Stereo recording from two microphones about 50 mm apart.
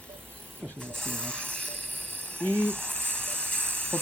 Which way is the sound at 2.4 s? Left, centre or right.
Left.